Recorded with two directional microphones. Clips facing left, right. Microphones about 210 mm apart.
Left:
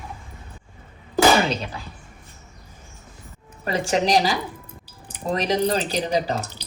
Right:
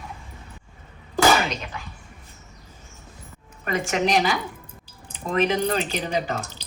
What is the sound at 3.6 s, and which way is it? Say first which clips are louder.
A woman's voice: left 2 dB; 35° left (ahead or behind).